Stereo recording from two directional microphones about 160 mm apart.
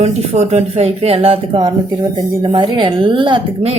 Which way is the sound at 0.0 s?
45° right (ahead or behind).